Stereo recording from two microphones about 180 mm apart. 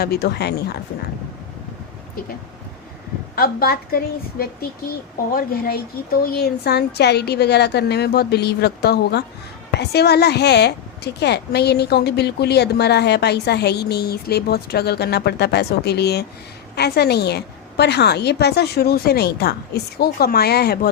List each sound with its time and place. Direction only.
0.0 s a woman's voice: 60° left (ahead or behind)
3.3 s a woman's voice: 55° left (ahead or behind)